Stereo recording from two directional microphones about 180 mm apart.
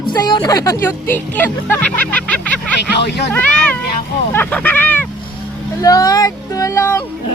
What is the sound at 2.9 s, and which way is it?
Speech, 70° left (ahead or behind).